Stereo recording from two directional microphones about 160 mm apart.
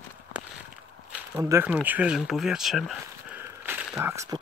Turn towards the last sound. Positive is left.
turn(degrees=-5)  # may be behind; listen again after turning